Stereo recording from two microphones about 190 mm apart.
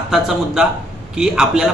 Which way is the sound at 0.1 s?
Centre (ahead or behind).